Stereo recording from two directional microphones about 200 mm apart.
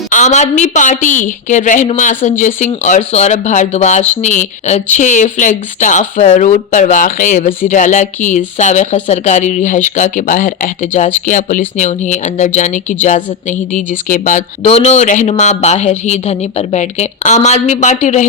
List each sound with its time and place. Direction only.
0.1 s speech: 35° left (ahead or behind)